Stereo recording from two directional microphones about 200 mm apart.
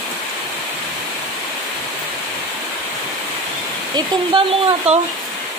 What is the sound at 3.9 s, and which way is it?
Speech, 25° right (ahead or behind).